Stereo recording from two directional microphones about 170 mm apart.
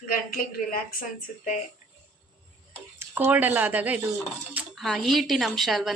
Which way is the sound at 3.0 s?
10° right (ahead or behind).